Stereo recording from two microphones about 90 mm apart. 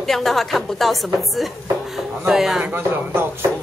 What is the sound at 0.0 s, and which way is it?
A woman's voice, centre (ahead or behind).